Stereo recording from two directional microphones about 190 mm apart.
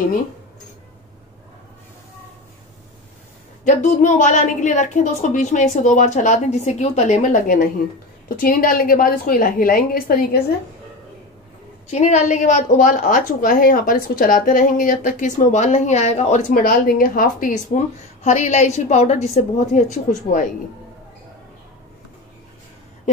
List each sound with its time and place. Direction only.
3.6 s a woman's voice: 40° left (ahead or behind)
11.9 s a woman's voice: 35° left (ahead or behind)
16.4 s a woman's voice: 50° left (ahead or behind)